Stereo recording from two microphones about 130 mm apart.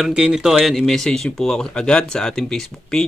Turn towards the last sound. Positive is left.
turn(degrees=5)  # may be behind; listen again after turning